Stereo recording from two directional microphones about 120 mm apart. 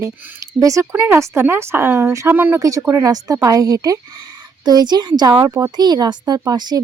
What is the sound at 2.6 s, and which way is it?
Speech, 30° right (ahead or behind).